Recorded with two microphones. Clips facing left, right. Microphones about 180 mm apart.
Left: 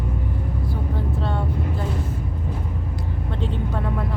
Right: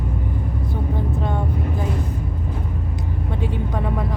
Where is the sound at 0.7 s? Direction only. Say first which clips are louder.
Right 4 dB; 15° right (ahead or behind).